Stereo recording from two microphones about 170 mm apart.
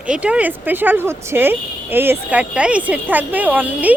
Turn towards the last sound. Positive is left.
turn(degrees=-10)  # may be behind; listen again after turning